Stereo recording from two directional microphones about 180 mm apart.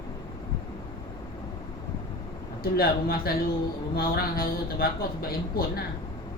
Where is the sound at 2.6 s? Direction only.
55° left (ahead or behind).